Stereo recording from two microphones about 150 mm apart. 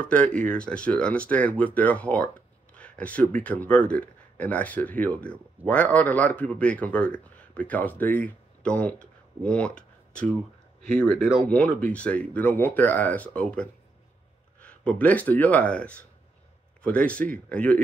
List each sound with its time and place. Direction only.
0.0 s speech: 10° left (ahead or behind)
11.4 s speech: 10° left (ahead or behind)